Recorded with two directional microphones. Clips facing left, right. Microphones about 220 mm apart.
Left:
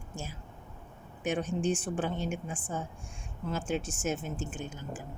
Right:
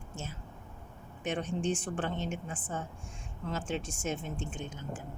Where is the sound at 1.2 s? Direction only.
5° left (ahead or behind).